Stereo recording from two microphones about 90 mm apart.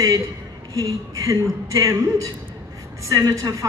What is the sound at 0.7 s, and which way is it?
A man's voice, 35° right (ahead or behind).